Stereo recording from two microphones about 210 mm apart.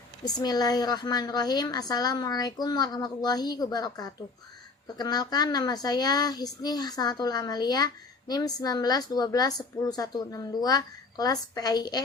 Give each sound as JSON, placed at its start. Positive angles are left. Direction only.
{"t": 0.3, "sound": "a woman's voice", "side_deg": 20}